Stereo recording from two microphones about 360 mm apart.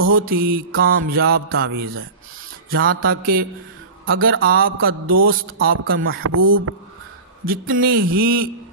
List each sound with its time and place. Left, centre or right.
0.2 s mantra: right
5.0 s mantra: right
5.6 s speech: right
7.4 s mantra: right